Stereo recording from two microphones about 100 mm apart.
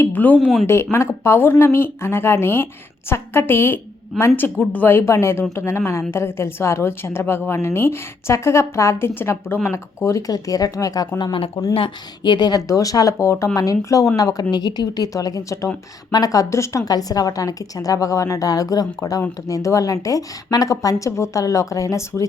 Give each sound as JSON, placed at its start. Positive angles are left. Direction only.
{"t": 0.0, "sound": "speech", "side_deg": 15}
{"t": 0.3, "sound": "speech", "side_deg": 0}
{"t": 0.7, "sound": "a woman's voice", "side_deg": 25}
{"t": 11.2, "sound": "a woman's voice", "side_deg": 60}